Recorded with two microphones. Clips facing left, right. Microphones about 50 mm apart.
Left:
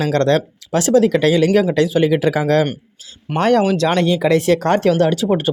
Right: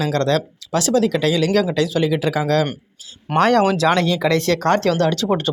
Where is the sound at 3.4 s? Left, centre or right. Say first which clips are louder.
Left 1 dB; centre.